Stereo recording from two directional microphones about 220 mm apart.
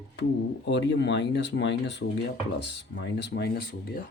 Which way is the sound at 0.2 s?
50° left (ahead or behind).